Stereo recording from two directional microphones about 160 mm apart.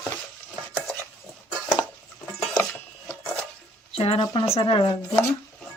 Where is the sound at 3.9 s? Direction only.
35° left (ahead or behind).